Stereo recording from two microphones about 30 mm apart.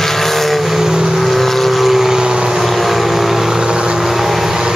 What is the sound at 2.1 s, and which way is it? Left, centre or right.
Vehicle, right.